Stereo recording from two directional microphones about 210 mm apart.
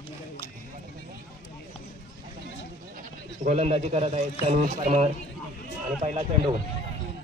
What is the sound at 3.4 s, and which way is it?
Speech, 35° right (ahead or behind).